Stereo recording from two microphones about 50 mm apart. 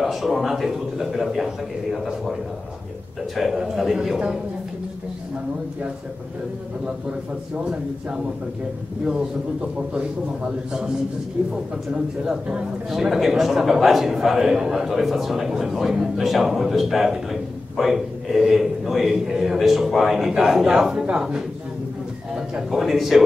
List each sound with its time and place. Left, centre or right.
0.0 s a man's voice: centre
3.3 s a man's voice: centre
12.3 s a man's voice: centre
12.9 s a man's voice: centre